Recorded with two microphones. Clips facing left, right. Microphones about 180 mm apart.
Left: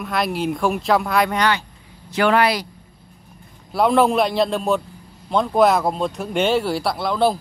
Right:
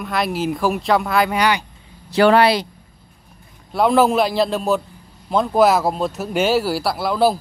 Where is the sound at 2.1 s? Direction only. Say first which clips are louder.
Right 4 dB; 35° right (ahead or behind).